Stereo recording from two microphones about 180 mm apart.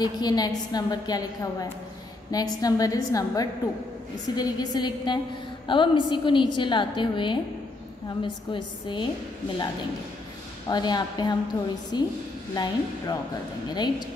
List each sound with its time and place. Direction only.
0.0 s a woman's voice: 20° left (ahead or behind)
10.7 s a woman's voice: 25° left (ahead or behind)